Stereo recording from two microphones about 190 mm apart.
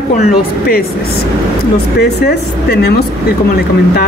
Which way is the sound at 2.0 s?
60° left (ahead or behind).